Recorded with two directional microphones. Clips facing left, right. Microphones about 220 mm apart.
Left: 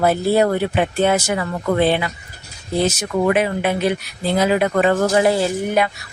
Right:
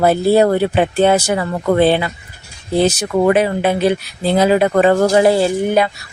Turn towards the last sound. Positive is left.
turn(degrees=-30)  # may be behind; listen again after turning